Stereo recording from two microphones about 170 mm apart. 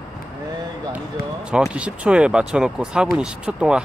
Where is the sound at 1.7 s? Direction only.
5° right (ahead or behind).